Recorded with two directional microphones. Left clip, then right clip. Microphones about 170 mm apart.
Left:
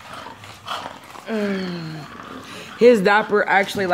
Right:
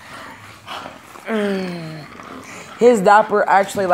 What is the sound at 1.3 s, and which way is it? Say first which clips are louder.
Speech: right 4 dB; 15° right (ahead or behind).